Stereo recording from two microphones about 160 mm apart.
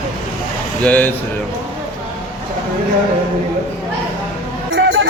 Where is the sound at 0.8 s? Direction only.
10° left (ahead or behind).